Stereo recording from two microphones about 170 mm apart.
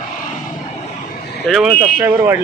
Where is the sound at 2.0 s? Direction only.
10° right (ahead or behind).